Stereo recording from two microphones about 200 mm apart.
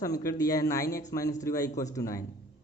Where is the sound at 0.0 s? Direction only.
15° left (ahead or behind).